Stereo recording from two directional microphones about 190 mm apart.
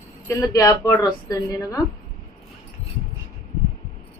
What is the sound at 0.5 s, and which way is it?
A woman's voice, 15° left (ahead or behind).